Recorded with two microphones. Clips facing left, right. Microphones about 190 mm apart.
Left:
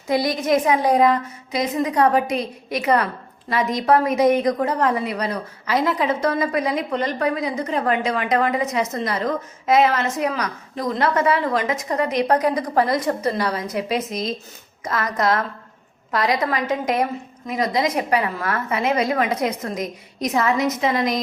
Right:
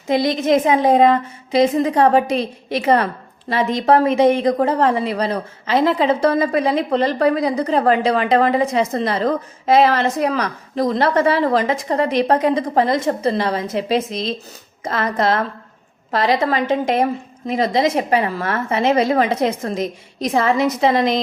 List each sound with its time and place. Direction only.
0.1 s a woman's voice: 25° right (ahead or behind)